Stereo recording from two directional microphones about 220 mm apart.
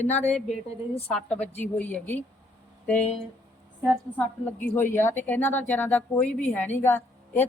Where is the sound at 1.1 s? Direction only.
5° left (ahead or behind).